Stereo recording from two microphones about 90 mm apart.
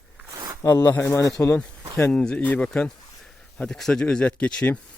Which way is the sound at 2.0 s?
10° left (ahead or behind).